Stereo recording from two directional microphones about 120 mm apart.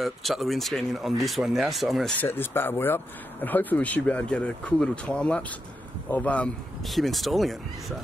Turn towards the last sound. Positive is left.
turn(degrees=0)  # may be behind; listen again after turning